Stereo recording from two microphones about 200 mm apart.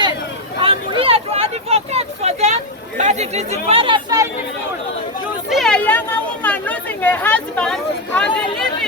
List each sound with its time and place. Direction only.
0.6 s vehicle: 25° right (ahead or behind)
3.0 s speech: 35° right (ahead or behind)
5.5 s chatter: centre (ahead or behind)